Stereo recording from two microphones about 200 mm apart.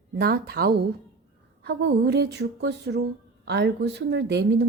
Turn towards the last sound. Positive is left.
turn(degrees=-55)  # may be behind; listen again after turning